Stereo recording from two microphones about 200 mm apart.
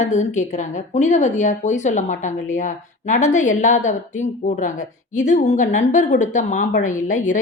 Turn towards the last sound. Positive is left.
turn(degrees=40)  # may be behind; listen again after turning